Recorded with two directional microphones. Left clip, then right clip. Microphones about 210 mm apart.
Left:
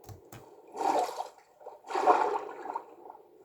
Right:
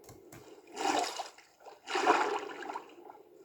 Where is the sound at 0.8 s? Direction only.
35° right (ahead or behind).